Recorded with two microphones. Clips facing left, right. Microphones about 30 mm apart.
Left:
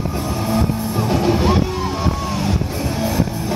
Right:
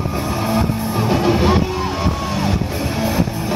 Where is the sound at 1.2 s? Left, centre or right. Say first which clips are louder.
Right 1 dB; centre.